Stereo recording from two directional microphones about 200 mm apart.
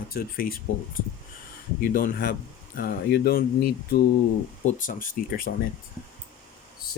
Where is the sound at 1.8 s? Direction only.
45° left (ahead or behind).